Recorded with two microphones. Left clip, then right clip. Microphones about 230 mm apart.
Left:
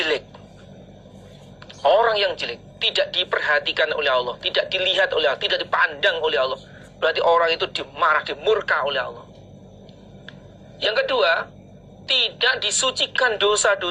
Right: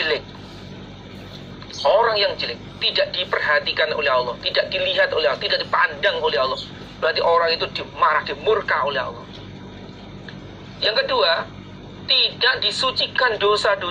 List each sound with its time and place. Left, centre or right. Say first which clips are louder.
1.8 s speech: even; left
10.8 s speech: right 1 dB; left